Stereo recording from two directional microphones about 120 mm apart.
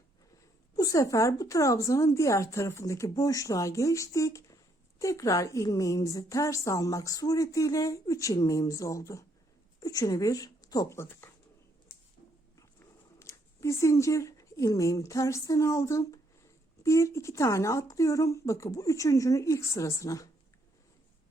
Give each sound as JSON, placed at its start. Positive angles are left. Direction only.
{"t": 0.8, "sound": "a woman's voice", "side_deg": 30}
{"t": 12.5, "sound": "a sound", "side_deg": 25}
{"t": 16.8, "sound": "a woman's voice", "side_deg": 25}